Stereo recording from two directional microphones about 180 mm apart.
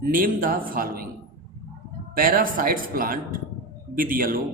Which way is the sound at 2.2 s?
50° right (ahead or behind).